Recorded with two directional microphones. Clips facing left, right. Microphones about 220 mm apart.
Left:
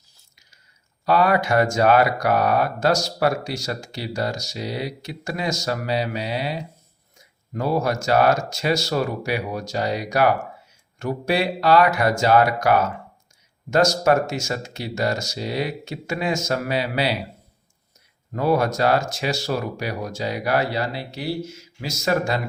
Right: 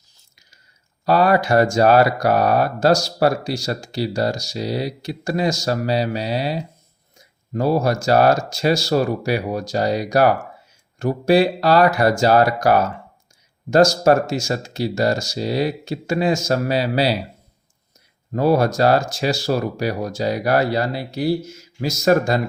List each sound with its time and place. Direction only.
1.0 s speech: 35° right (ahead or behind)
18.3 s speech: 35° right (ahead or behind)